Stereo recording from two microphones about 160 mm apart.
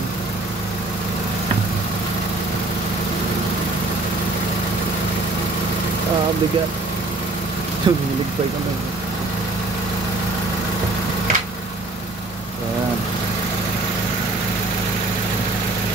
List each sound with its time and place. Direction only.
7.9 s speech: 25° right (ahead or behind)